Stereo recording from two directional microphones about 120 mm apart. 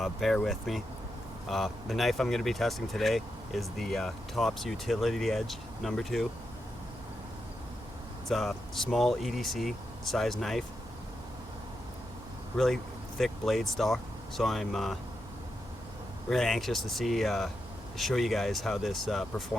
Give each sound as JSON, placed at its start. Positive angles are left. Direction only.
{"t": 0.0, "sound": "speech", "side_deg": 0}
{"t": 8.3, "sound": "speech", "side_deg": 0}
{"t": 12.5, "sound": "speech", "side_deg": 5}
{"t": 16.3, "sound": "speech", "side_deg": 5}